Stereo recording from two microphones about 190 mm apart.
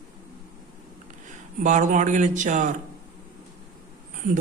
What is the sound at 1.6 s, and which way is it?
Speech, 40° right (ahead or behind).